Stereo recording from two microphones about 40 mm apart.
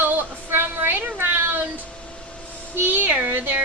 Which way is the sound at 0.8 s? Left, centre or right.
Right.